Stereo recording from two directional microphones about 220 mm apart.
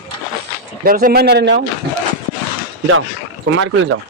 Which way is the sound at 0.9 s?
40° right (ahead or behind).